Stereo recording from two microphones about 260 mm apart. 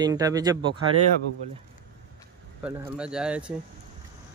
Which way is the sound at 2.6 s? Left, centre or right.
Centre.